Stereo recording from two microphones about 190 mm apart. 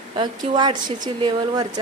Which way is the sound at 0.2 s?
25° right (ahead or behind).